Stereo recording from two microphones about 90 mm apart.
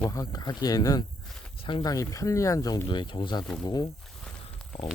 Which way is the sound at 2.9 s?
60° left (ahead or behind).